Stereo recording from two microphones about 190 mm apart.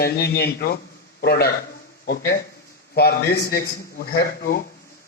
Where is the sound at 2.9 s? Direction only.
55° left (ahead or behind).